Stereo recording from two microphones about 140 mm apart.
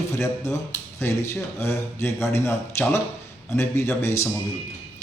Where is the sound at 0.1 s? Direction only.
20° left (ahead or behind).